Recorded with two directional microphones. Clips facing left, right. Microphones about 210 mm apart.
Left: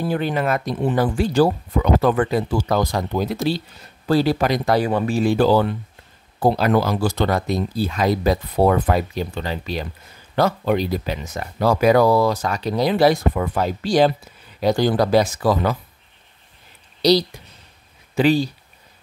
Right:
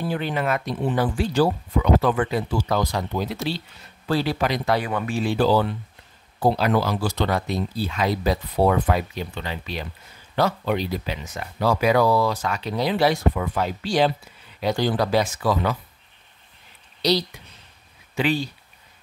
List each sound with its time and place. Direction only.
0.1 s speech: 40° left (ahead or behind)
18.1 s speech: 35° left (ahead or behind)